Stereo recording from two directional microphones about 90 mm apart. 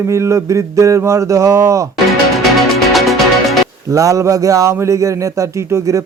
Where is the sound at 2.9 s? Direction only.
Centre (ahead or behind).